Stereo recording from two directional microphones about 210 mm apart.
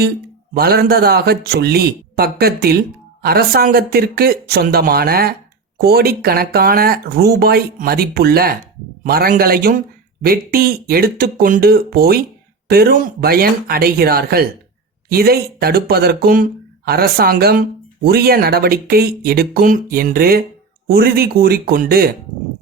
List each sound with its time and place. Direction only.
0.5 s speech: 50° right (ahead or behind)